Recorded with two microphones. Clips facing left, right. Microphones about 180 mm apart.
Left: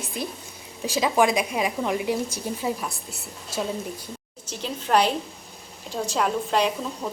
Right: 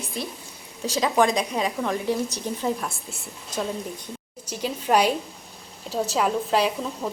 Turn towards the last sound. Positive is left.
turn(degrees=0)  # may be behind; listen again after turning